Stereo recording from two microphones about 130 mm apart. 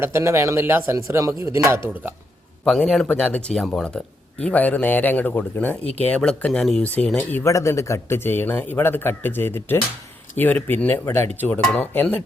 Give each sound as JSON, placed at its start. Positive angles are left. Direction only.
{"t": 0.0, "sound": "speech", "side_deg": -20}
{"t": 2.6, "sound": "speech", "side_deg": 5}
{"t": 5.8, "sound": "speech", "side_deg": 50}
{"t": 6.1, "sound": "speech", "side_deg": 10}